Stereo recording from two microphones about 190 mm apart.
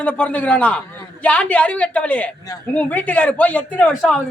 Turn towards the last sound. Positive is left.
turn(degrees=5)  # may be behind; listen again after turning